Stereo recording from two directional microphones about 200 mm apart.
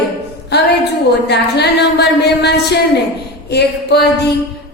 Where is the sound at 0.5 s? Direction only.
55° left (ahead or behind).